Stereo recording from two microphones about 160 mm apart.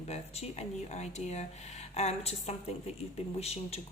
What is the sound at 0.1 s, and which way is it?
Speech, 40° left (ahead or behind).